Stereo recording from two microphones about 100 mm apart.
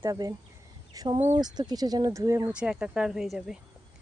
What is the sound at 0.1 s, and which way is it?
A woman's voice, 35° right (ahead or behind).